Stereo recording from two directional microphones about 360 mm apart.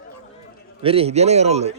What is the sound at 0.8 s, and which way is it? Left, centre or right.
Speech, centre.